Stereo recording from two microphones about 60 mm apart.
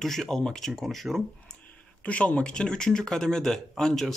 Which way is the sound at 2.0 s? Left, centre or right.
Left.